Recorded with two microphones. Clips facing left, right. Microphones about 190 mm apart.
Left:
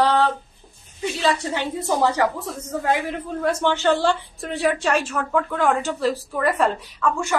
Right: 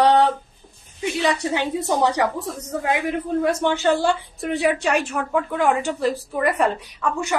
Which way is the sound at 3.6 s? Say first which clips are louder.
Left 3 dB; 10° right (ahead or behind).